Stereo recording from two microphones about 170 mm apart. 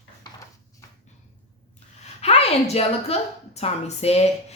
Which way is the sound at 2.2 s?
40° left (ahead or behind).